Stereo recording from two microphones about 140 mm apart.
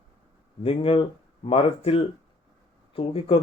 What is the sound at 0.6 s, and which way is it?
Speech, 40° left (ahead or behind).